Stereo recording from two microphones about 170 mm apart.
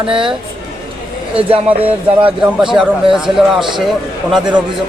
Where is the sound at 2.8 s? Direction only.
5° right (ahead or behind).